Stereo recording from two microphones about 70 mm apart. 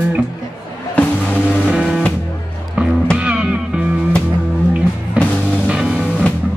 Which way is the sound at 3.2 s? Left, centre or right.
Centre.